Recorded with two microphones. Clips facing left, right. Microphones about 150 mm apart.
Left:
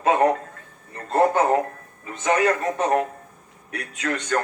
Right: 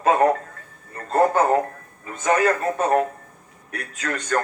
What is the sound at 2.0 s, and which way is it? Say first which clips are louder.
A man's voice: right 1 dB; 35° right (ahead or behind).